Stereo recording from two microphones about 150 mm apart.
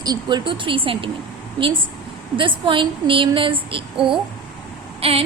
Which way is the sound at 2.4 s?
35° right (ahead or behind).